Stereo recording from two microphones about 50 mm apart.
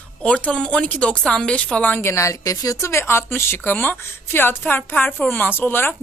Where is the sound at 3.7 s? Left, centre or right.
Left.